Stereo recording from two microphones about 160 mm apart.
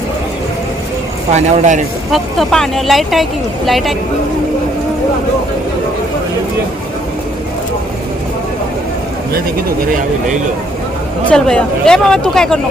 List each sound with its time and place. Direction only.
1.3 s speech: 50° right (ahead or behind)
2.1 s speech: centre (ahead or behind)
11.3 s speech: 5° left (ahead or behind)